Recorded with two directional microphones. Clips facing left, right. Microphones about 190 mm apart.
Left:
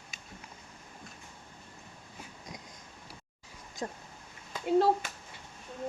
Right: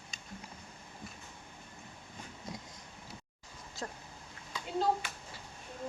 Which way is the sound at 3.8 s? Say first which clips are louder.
Left 4 dB; 15° left (ahead or behind).